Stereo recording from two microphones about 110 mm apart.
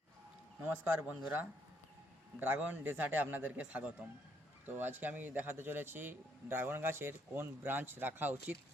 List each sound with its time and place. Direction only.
0.6 s a man's voice: 15° right (ahead or behind)